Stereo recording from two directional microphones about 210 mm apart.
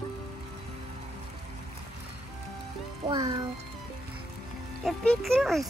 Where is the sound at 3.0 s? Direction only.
20° right (ahead or behind).